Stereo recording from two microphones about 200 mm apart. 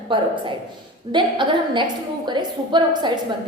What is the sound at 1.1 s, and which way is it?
A woman's voice, 25° right (ahead or behind).